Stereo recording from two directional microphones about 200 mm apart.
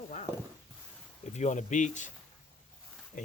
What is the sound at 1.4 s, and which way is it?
Speech, 35° left (ahead or behind).